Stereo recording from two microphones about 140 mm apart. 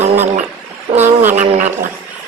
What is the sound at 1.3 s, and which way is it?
Speech, 55° right (ahead or behind).